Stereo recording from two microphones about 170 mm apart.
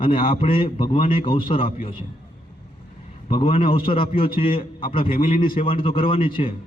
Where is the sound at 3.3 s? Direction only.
30° left (ahead or behind).